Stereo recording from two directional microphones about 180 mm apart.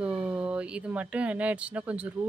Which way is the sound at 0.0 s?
5° right (ahead or behind).